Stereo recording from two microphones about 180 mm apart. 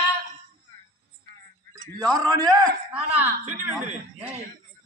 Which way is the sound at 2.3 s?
20° right (ahead or behind).